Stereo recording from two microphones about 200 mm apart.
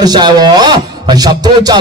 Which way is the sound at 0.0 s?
20° right (ahead or behind).